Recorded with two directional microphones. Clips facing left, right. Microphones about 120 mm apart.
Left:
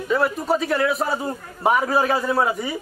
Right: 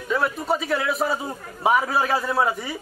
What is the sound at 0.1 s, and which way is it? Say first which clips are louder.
A man's voice: left 3 dB; centre (ahead or behind).